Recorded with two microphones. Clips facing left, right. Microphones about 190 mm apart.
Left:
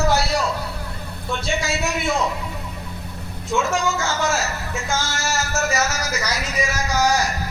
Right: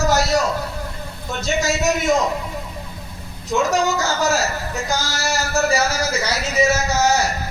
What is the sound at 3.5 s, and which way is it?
A man's voice, 40° right (ahead or behind).